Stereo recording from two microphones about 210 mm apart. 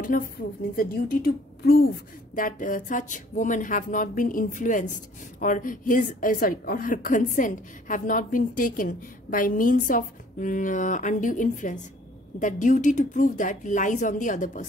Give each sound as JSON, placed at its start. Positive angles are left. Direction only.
{"t": 0.1, "sound": "a woman's voice", "side_deg": 40}